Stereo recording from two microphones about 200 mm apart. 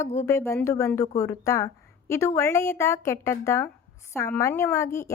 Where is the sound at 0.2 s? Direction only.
15° left (ahead or behind).